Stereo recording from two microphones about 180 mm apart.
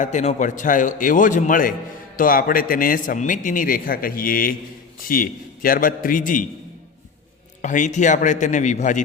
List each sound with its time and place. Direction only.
0.0 s a man's voice: 40° left (ahead or behind)
7.6 s a man's voice: 45° left (ahead or behind)